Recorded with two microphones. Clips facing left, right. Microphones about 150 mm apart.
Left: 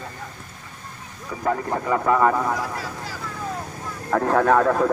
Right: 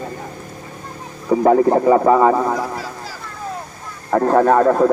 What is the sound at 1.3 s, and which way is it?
A man's voice, 45° right (ahead or behind).